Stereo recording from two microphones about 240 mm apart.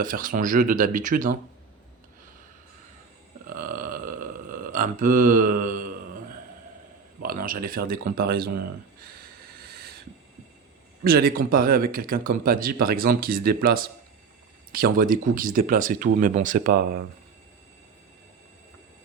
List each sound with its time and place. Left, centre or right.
0.0 s speech: right
3.4 s a sound: right
7.2 s speech: right
9.6 s owl: right
11.0 s speech: right